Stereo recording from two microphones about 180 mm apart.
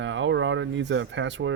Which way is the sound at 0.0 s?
90° right.